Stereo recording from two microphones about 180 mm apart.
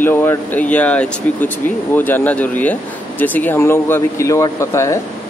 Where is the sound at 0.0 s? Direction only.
10° left (ahead or behind).